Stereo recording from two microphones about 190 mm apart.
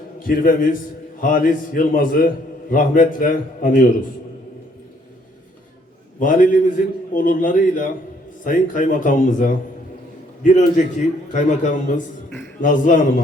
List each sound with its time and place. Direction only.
0.2 s a man's voice: 45° left (ahead or behind)
6.1 s a man's voice: 45° left (ahead or behind)